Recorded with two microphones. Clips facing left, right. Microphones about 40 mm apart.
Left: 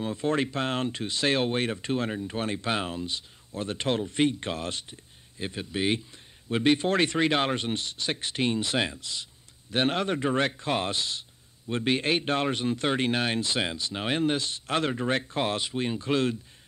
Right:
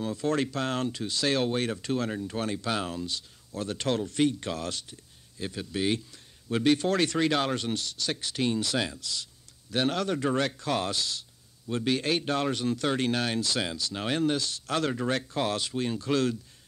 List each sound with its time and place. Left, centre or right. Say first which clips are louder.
0.0 s speech: left 1 dB; left